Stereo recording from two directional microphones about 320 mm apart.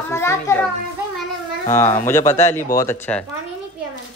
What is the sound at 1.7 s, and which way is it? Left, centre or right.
Speech, centre.